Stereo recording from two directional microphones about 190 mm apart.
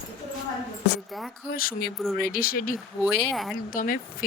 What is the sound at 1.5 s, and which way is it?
Speech, 50° left (ahead or behind).